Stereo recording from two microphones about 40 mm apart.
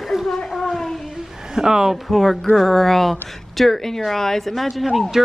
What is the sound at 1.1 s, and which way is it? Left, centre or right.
A woman's voice, centre.